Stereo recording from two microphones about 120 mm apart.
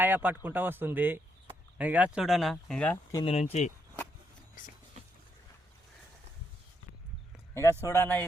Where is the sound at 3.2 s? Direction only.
60° left (ahead or behind); by 3.7 s 75° left (ahead or behind).